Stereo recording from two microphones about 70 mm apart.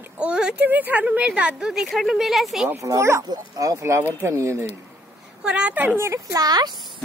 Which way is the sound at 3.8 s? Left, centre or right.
Right.